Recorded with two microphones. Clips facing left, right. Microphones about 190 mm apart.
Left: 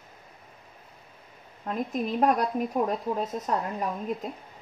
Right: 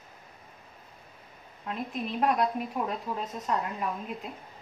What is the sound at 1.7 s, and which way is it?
Speech, 45° left (ahead or behind).